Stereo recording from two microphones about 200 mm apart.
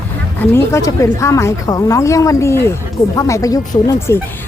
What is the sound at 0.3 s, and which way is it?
A woman's voice, 15° left (ahead or behind).